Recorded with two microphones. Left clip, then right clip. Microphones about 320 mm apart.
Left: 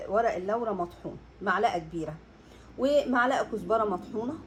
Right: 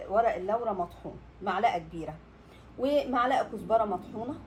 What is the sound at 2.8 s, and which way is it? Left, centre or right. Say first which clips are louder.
A woman's voice: left 2 dB; left.